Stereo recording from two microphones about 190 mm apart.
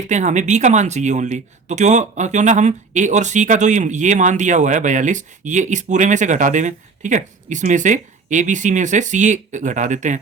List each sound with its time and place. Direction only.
0.1 s speech: 40° right (ahead or behind)